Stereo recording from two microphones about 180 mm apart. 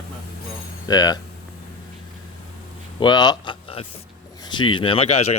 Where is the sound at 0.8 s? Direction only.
20° left (ahead or behind).